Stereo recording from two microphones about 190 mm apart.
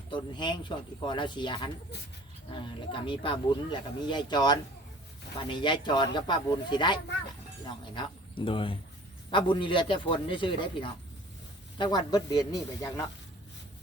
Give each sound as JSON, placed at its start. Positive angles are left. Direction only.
{"t": 0.1, "sound": "speech", "side_deg": 25}